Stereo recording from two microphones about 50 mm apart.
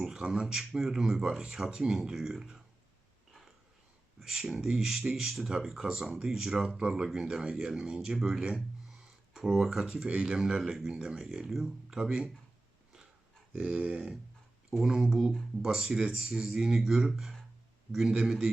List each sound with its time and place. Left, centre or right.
0.0 s speech: centre
4.2 s speech: centre
8.9 s a sound: centre
10.4 s speech: centre
13.6 s a sound: right
14.7 s speech: centre